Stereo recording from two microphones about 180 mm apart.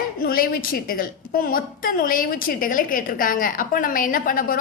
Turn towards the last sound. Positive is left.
turn(degrees=50)  # may be behind; listen again after turning